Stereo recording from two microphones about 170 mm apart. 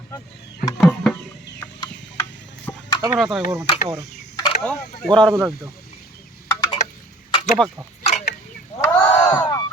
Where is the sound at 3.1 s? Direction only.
Centre (ahead or behind).